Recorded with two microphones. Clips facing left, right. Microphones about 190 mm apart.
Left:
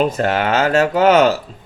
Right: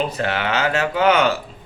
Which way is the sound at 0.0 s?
45° left (ahead or behind).